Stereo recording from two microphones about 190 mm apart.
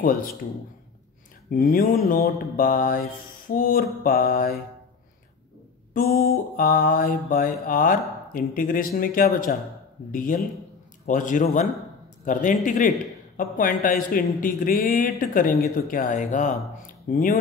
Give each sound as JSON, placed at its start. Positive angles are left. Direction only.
{"t": 0.0, "sound": "speech", "side_deg": 50}
{"t": 1.5, "sound": "speech", "side_deg": 45}
{"t": 5.9, "sound": "a man's voice", "side_deg": 55}